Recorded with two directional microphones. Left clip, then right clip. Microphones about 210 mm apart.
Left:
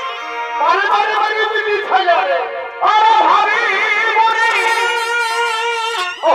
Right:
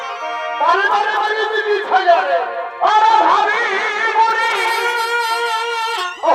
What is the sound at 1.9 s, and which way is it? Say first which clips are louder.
Speech: right 1 dB; 15° left (ahead or behind).